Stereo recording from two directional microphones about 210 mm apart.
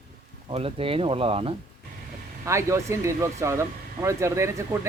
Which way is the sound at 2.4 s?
15° right (ahead or behind).